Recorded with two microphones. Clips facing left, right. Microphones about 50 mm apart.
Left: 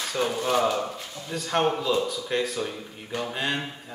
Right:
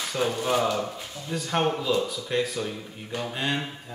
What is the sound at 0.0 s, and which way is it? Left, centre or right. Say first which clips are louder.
Speech: even; centre.